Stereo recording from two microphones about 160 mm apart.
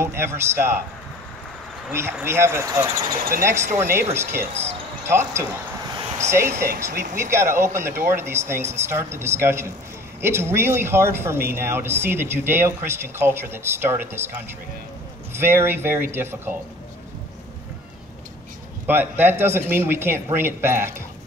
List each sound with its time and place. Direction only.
0.0 s speech: 15° right (ahead or behind)
1.9 s speech: 15° right (ahead or behind)
15.3 s speech: 15° right (ahead or behind)
18.9 s speech: 10° right (ahead or behind)